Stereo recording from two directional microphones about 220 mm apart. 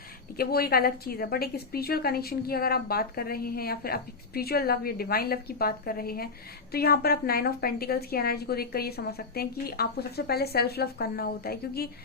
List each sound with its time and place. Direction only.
0.3 s a woman's voice: 45° left (ahead or behind)